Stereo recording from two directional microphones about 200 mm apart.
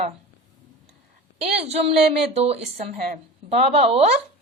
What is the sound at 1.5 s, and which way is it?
A woman's voice, 30° right (ahead or behind).